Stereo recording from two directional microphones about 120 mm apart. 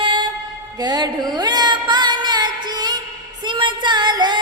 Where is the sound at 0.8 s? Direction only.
35° right (ahead or behind).